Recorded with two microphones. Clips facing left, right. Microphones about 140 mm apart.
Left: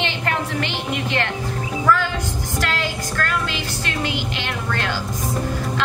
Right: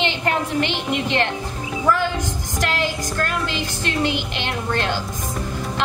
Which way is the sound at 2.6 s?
15° right (ahead or behind).